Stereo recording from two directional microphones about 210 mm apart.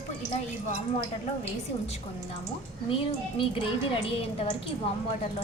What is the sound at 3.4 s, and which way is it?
A woman's voice, 25° left (ahead or behind).